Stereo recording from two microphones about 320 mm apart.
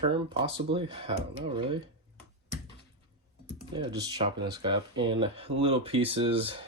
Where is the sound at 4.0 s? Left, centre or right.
Centre.